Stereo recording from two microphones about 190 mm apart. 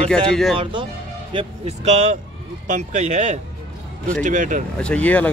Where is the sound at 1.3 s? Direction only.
35° right (ahead or behind).